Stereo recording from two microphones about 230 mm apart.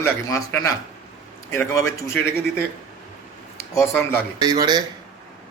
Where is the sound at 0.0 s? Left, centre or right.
Centre.